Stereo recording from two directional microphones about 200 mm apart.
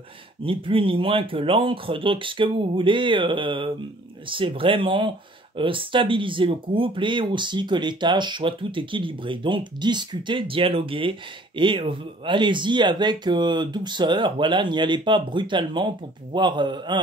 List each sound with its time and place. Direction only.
0.4 s speech: 25° right (ahead or behind)